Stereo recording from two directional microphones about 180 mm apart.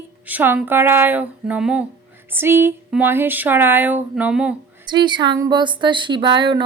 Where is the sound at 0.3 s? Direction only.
10° right (ahead or behind).